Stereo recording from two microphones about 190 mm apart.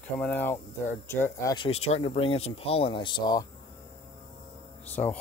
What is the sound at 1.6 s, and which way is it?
Speech, 35° left (ahead or behind).